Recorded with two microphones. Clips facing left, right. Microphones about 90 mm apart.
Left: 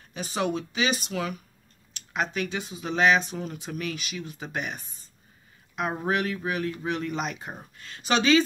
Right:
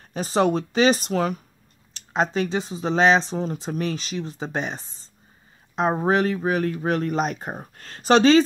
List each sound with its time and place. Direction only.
0.1 s speech: 40° right (ahead or behind)